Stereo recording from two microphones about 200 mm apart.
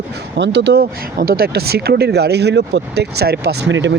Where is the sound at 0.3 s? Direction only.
60° right (ahead or behind).